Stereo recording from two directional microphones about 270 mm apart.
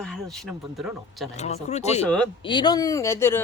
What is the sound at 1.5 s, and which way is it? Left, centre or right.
Speech, left.